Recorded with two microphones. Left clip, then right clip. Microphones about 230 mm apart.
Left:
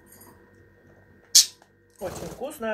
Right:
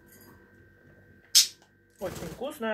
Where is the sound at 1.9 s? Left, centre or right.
Centre.